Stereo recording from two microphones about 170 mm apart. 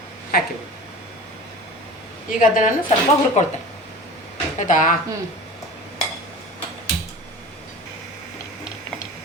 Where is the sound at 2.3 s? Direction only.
50° left (ahead or behind).